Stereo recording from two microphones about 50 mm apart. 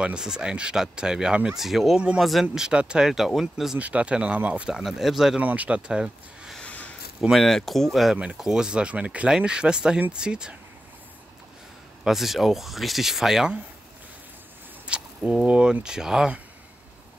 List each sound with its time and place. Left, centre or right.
0.0 s speech: centre
1.6 s speech: centre
2.5 s speech: centre
3.3 s speech: centre
3.7 s speech: right
4.6 s speech: centre
5.4 s speech: right
6.6 s a sound: left
7.3 s speech: centre
8.4 s speech: centre
12.0 s speech: centre
14.9 s speech: right